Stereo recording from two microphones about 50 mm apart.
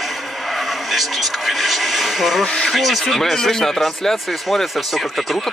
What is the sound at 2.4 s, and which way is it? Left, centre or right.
Speech, centre.